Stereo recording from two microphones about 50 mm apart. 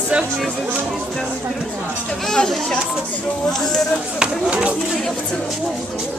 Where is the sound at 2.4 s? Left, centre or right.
Centre.